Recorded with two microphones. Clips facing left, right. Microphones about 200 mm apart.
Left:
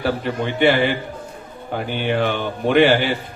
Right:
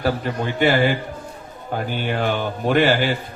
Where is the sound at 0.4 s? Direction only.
45° right (ahead or behind).